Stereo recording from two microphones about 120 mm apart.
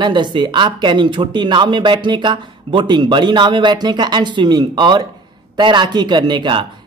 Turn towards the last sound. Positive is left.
turn(degrees=-40)  # may be behind; listen again after turning